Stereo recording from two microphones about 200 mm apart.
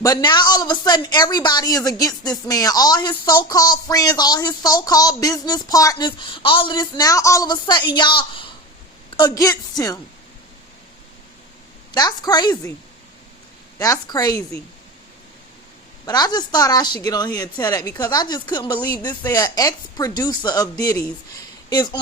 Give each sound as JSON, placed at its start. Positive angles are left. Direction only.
{"t": 0.0, "sound": "a woman's voice", "side_deg": 20}
{"t": 11.9, "sound": "speech", "side_deg": 20}
{"t": 13.7, "sound": "a woman's voice", "side_deg": 15}
{"t": 16.0, "sound": "speech", "side_deg": 20}